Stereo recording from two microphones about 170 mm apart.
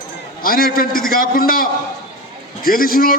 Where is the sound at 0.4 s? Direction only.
60° left (ahead or behind).